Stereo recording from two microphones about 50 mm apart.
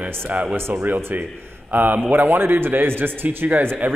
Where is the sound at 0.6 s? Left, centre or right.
Right.